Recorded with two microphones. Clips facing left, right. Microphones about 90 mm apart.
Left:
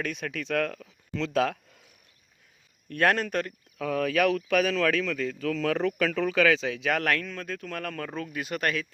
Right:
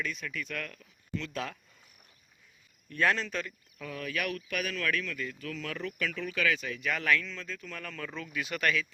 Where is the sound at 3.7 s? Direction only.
90° left.